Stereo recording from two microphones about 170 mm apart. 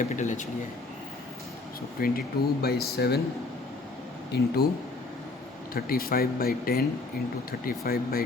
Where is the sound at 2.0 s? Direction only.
60° left (ahead or behind).